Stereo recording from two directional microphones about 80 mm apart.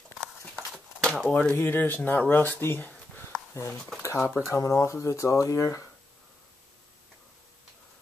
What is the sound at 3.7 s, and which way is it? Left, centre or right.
Speech, centre.